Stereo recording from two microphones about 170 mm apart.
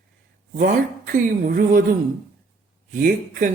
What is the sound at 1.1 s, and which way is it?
Mantra, 55° right (ahead or behind).